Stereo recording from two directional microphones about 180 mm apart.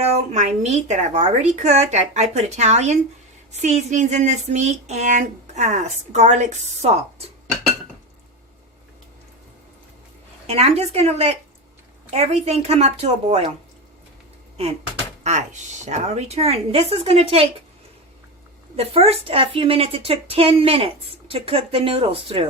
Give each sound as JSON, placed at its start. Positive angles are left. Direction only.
{"t": 0.0, "sound": "speech", "side_deg": -40}
{"t": 10.4, "sound": "speech", "side_deg": -35}
{"t": 15.2, "sound": "speech", "side_deg": -40}
{"t": 18.8, "sound": "speech", "side_deg": -35}